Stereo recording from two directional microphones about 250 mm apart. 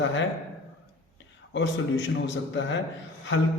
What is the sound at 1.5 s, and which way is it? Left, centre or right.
A man's voice, left.